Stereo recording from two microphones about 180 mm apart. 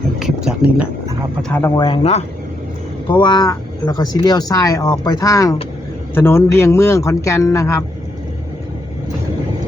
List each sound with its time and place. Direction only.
0.2 s a sound: centre (ahead or behind)
1.4 s speech: 5° left (ahead or behind)
1.6 s speech: 20° left (ahead or behind)
3.1 s a man's voice: 25° left (ahead or behind)